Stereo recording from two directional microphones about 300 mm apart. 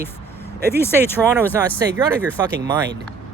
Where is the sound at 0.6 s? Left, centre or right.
Centre.